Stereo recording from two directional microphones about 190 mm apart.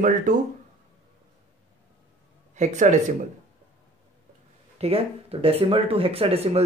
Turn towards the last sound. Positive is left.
turn(degrees=-30)  # may be behind; listen again after turning